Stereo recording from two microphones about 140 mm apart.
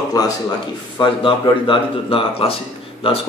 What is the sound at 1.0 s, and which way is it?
A man's voice, 40° left (ahead or behind).